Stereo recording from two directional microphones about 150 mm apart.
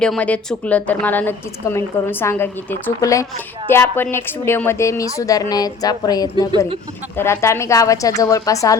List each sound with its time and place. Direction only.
0.0 s a woman's voice: 5° left (ahead or behind)